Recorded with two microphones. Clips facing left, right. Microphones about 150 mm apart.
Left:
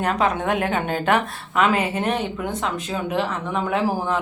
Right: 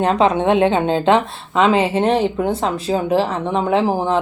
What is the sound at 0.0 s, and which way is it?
Speech, 30° right (ahead or behind).